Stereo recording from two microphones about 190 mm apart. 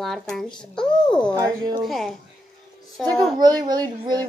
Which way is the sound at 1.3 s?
20° right (ahead or behind).